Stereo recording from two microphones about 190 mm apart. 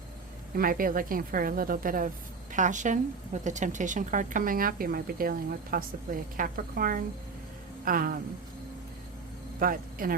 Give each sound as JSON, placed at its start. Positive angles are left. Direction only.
{"t": 0.5, "sound": "a woman's voice", "side_deg": -50}
{"t": 9.6, "sound": "speech", "side_deg": -50}